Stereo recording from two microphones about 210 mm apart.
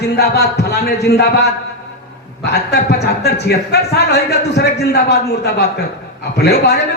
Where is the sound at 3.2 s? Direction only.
50° left (ahead or behind).